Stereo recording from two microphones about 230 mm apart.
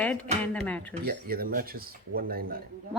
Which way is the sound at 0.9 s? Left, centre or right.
Right.